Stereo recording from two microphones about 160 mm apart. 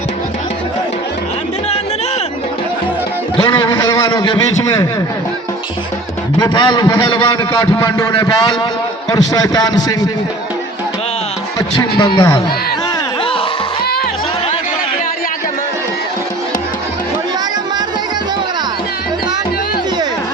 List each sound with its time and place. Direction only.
3.3 s a man's voice: 15° left (ahead or behind)
6.4 s a man's voice: 25° left (ahead or behind)
11.8 s a man's voice: 30° left (ahead or behind)